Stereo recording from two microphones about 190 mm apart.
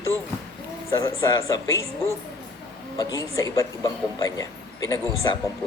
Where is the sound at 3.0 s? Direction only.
15° left (ahead or behind).